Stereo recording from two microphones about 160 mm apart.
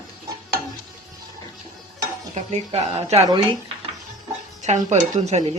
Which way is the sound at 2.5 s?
40° right (ahead or behind).